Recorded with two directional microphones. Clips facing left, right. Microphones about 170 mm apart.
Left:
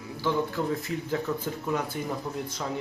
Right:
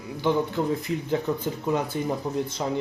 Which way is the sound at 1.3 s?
15° right (ahead or behind).